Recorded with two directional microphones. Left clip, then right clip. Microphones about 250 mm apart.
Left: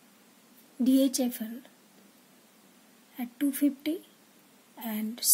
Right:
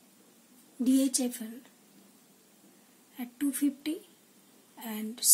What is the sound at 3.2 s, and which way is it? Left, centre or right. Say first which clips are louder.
A woman's voice: left 3 dB; left.